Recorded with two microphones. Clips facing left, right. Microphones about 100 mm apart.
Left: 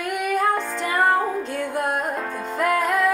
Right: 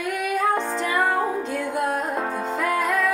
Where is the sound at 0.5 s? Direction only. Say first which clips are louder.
Right 1 dB; 30° right (ahead or behind).